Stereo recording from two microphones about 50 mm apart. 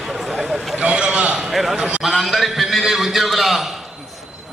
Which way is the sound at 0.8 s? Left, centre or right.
Right.